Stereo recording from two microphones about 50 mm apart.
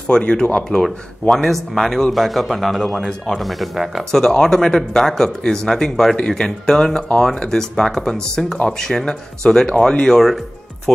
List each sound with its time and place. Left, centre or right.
0.1 s speech: centre
1.3 s speech: centre
4.1 s speech: centre